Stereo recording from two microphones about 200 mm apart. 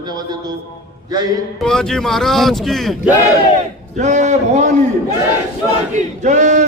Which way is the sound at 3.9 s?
35° right (ahead or behind).